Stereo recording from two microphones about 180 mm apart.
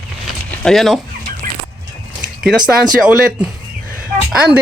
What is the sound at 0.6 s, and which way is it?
Speech, centre (ahead or behind).